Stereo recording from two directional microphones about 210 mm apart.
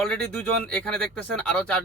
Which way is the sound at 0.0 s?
5° left (ahead or behind).